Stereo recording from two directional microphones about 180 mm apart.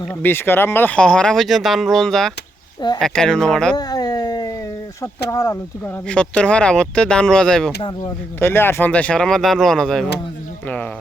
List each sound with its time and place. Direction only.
0.1 s speech: 10° left (ahead or behind)
3.8 s a sound: 20° left (ahead or behind)
5.3 s speech: 20° left (ahead or behind)
6.1 s speech: 5° left (ahead or behind)
7.8 s speech: 25° left (ahead or behind)
8.4 s speech: 10° left (ahead or behind)